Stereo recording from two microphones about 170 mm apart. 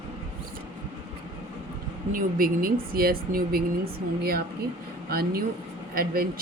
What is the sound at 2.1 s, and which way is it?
Speech, 55° right (ahead or behind).